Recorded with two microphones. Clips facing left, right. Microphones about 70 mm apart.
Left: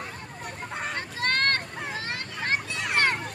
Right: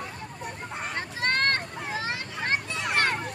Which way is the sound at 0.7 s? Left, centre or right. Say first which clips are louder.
Left 3 dB; centre.